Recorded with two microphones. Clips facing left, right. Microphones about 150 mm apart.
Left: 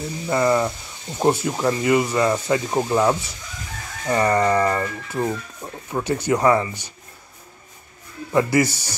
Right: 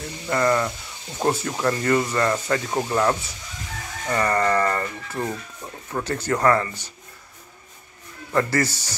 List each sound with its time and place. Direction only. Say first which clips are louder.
0.0 s speech: left 2 dB; 10° left (ahead or behind)
8.3 s speech: left 4 dB; 15° left (ahead or behind)